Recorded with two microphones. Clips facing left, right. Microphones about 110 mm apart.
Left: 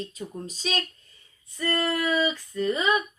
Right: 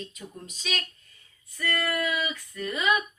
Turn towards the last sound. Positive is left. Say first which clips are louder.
# left 3 dB
turn(degrees=30)  # may be behind; listen again after turning